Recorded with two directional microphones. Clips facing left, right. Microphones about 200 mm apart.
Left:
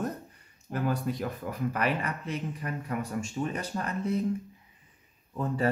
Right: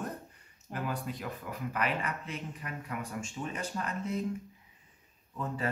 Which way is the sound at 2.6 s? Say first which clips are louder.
Left 6 dB; 40° left (ahead or behind).